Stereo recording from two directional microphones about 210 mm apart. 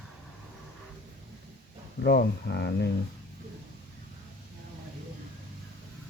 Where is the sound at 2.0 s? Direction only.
50° left (ahead or behind).